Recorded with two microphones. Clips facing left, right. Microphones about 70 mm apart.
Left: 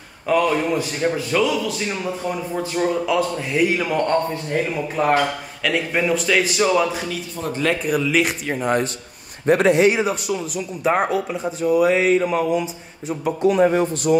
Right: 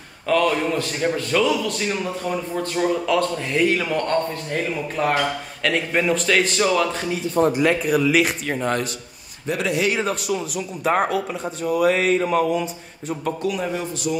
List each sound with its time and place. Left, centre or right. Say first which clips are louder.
0.3 s a man's voice: left 1 dB; centre
7.4 s speech: right 11 dB; right
8.0 s a man's voice: right 1 dB; centre
8.5 s a man's voice: left 1 dB; centre
9.5 s a man's voice: left 8 dB; left
10.0 s a man's voice: left 1 dB; centre
13.4 s a man's voice: left 8 dB; left